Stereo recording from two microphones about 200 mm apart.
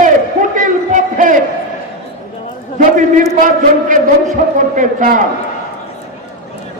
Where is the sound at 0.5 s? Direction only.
40° right (ahead or behind).